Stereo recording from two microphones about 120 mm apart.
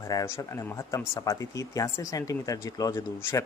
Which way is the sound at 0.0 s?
30° left (ahead or behind).